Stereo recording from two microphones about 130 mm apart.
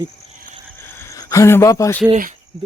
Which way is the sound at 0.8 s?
15° left (ahead or behind).